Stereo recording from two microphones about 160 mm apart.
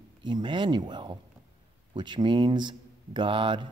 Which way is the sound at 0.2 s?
30° right (ahead or behind).